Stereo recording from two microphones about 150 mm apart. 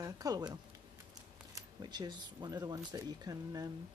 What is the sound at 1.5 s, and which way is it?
Speech, 25° right (ahead or behind).